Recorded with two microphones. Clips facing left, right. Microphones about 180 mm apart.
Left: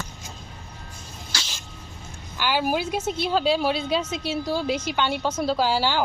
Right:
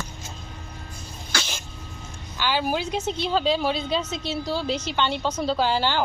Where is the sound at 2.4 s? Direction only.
10° left (ahead or behind).